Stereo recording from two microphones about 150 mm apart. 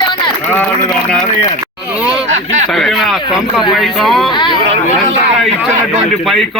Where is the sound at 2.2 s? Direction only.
50° right (ahead or behind).